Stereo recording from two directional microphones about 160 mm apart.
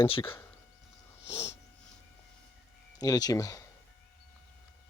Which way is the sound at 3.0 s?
25° left (ahead or behind).